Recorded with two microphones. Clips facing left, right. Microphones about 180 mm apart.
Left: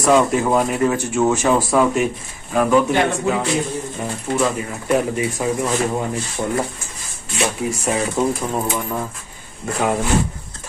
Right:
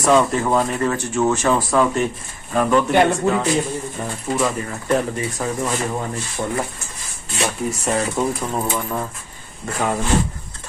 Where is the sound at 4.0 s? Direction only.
5° left (ahead or behind).